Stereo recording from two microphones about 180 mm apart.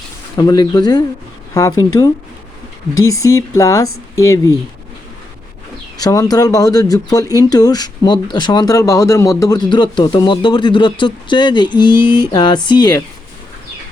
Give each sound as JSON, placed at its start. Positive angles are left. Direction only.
{"t": 0.3, "sound": "speech", "side_deg": 25}
{"t": 3.1, "sound": "speech", "side_deg": 15}
{"t": 6.0, "sound": "speech", "side_deg": 20}